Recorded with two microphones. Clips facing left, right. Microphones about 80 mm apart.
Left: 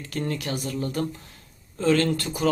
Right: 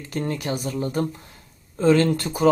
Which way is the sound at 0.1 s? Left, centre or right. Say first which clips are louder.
Right 3 dB; right.